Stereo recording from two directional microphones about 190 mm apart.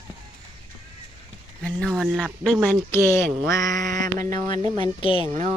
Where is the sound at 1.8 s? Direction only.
5° right (ahead or behind).